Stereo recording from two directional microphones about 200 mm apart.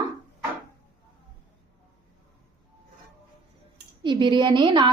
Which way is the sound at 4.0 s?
25° right (ahead or behind).